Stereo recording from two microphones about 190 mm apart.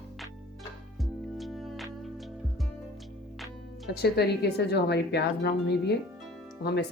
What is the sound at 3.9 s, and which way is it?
A woman's voice, 60° left (ahead or behind).